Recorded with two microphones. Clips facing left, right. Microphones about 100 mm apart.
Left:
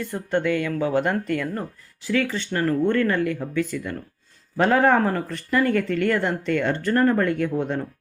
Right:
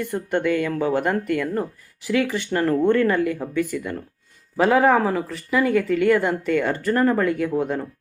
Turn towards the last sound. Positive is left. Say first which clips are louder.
# right 1 dB
turn(degrees=-5)  # may be behind; listen again after turning